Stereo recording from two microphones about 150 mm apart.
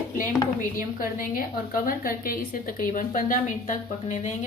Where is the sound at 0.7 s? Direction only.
70° left (ahead or behind).